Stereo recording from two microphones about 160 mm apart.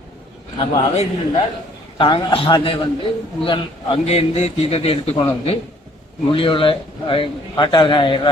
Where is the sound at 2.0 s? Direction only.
35° left (ahead or behind).